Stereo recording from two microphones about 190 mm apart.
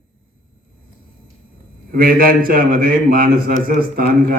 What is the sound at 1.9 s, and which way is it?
A man's voice, 50° right (ahead or behind).